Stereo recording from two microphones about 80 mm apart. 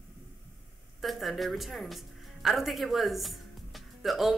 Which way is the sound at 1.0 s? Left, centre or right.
Centre.